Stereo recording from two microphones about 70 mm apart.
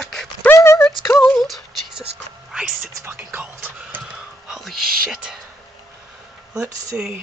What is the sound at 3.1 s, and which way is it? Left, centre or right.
Speech, right.